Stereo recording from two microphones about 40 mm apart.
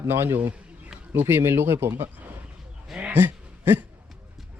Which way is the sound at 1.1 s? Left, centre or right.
Right.